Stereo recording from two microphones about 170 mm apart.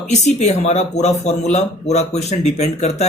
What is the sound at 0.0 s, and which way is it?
Speech, 40° left (ahead or behind).